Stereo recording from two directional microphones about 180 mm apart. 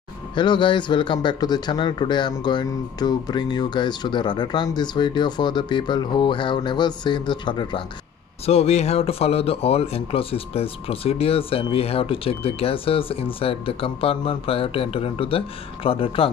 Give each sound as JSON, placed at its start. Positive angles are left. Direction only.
{"t": 0.3, "sound": "a man's voice", "side_deg": 25}